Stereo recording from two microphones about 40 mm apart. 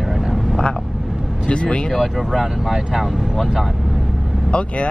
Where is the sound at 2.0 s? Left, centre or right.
Centre.